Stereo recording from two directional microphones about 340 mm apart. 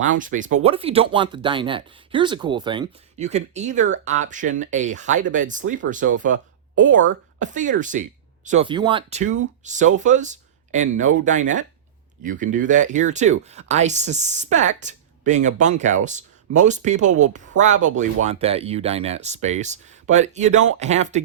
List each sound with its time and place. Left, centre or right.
0.0 s speech: right